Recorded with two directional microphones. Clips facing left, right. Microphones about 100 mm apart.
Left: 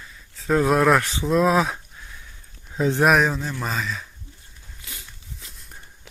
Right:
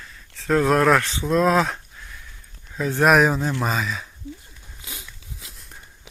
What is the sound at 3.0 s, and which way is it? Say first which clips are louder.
Speech: right 3 dB; centre (ahead or behind).